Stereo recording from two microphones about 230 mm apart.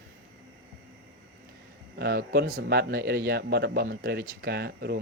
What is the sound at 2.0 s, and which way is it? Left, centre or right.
Speech, right.